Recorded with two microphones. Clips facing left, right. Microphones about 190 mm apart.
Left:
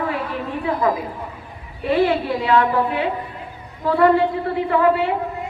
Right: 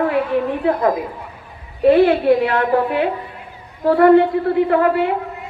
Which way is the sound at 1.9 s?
55° right (ahead or behind).